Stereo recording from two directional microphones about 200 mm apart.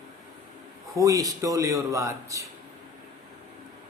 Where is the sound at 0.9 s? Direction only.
15° right (ahead or behind).